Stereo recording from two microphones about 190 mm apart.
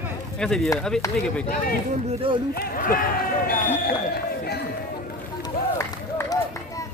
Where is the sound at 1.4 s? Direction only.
50° left (ahead or behind).